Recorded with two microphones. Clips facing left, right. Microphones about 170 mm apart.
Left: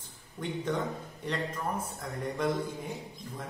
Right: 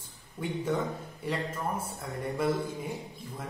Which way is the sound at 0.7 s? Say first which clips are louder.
Right 2 dB; 10° right (ahead or behind).